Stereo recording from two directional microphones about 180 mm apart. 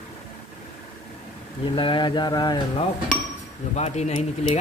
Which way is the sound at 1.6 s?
30° left (ahead or behind).